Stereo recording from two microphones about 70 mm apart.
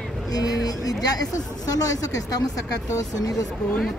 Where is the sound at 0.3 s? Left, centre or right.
Left.